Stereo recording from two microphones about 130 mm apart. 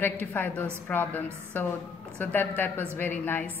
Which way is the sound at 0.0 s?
15° left (ahead or behind).